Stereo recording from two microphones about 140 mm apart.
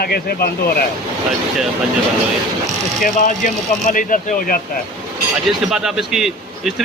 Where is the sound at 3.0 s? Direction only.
70° left (ahead or behind).